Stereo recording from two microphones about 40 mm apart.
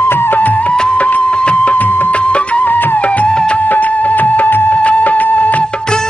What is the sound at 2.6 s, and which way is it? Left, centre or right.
Music, left.